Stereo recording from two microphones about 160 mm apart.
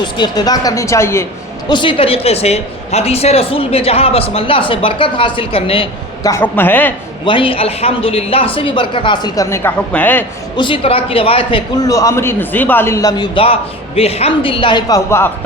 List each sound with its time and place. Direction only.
0.0 s a man's voice: 25° left (ahead or behind)
1.6 s a woman's voice: 30° left (ahead or behind)
6.2 s a woman's voice: 15° left (ahead or behind)
7.3 s a woman's voice: 35° left (ahead or behind); by 10.2 s 10° left (ahead or behind)
10.6 s a woman's voice: 35° left (ahead or behind)
11.8 s a man's voice: 20° left (ahead or behind)